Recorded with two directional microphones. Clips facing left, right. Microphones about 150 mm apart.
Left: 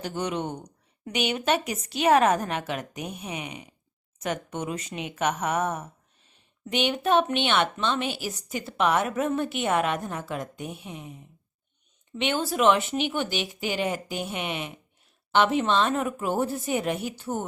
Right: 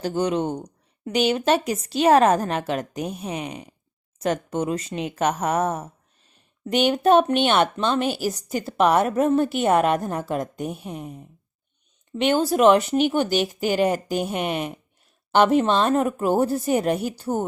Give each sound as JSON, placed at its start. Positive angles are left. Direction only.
{"t": 0.0, "sound": "a woman's voice", "side_deg": -30}